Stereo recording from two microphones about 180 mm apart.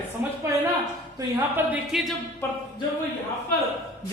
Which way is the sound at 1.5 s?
5° right (ahead or behind).